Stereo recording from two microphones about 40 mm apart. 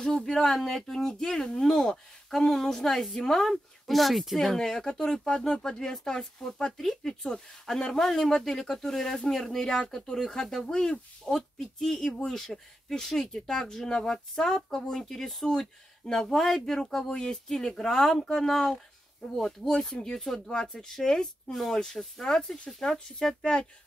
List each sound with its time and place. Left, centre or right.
0.0 s speech: centre
3.4 s speech: centre
4.6 s speech: centre
22.9 s speech: centre